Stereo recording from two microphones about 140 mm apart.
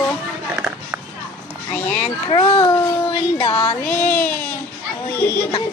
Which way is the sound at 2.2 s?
35° left (ahead or behind).